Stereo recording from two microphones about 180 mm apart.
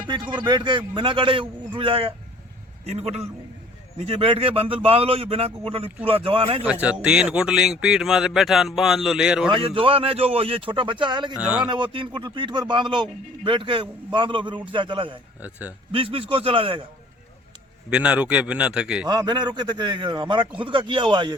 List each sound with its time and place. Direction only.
0.1 s a man's voice: 25° right (ahead or behind)
6.6 s speech: 10° right (ahead or behind)
9.5 s speech: 30° right (ahead or behind)
11.3 s speech: 5° right (ahead or behind)
11.7 s speech: 25° right (ahead or behind)
15.4 s speech: 10° right (ahead or behind)
15.9 s speech: 30° right (ahead or behind)
17.9 s speech: 5° right (ahead or behind)
19.0 s speech: 25° right (ahead or behind)